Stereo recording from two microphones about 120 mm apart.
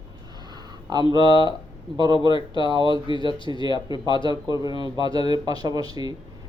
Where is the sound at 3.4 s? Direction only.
45° left (ahead or behind).